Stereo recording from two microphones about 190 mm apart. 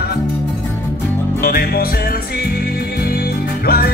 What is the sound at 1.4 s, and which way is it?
Music, 50° left (ahead or behind).